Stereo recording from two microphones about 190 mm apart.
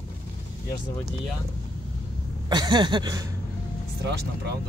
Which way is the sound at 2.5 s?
20° right (ahead or behind).